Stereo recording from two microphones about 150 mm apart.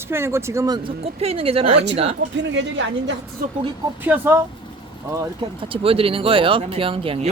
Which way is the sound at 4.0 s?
15° right (ahead or behind).